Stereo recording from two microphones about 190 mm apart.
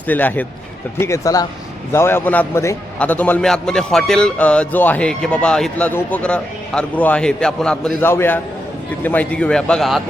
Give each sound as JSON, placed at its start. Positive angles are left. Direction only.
{"t": 0.1, "sound": "a man's voice", "side_deg": 10}